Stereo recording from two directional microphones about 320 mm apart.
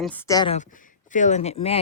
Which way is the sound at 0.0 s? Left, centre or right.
Centre.